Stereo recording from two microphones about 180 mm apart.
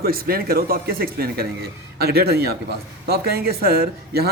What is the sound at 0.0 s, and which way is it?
A man's voice, 55° right (ahead or behind).